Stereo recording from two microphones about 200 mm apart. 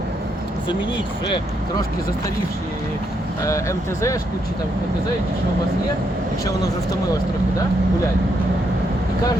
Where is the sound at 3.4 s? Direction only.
15° left (ahead or behind).